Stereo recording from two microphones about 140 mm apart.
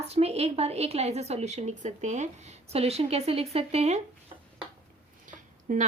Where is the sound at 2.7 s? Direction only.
45° right (ahead or behind).